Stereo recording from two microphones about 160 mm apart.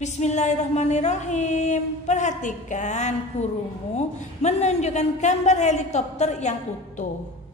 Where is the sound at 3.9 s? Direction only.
45° left (ahead or behind).